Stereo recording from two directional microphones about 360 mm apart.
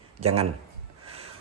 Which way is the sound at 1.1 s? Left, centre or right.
Centre.